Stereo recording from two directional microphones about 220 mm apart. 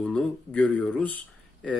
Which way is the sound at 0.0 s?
5° left (ahead or behind).